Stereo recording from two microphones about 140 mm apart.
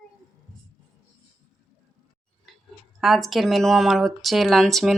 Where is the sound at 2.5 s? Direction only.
Centre (ahead or behind).